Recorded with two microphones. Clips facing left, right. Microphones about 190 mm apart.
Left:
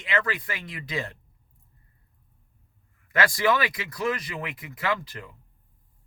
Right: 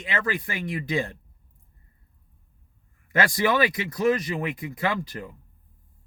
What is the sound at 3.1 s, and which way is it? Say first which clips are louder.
Speech: right 1 dB; 25° right (ahead or behind).